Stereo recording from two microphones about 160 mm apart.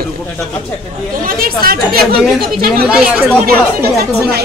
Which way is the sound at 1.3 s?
65° right (ahead or behind).